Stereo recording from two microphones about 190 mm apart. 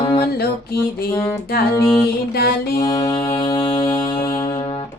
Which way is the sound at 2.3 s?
55° left (ahead or behind).